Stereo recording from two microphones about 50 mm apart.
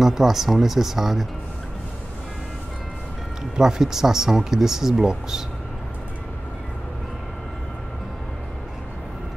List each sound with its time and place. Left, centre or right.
0.0 s speech: centre
3.5 s speech: centre